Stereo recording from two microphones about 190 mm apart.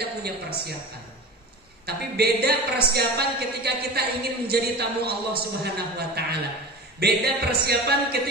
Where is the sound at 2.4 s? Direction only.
55° right (ahead or behind).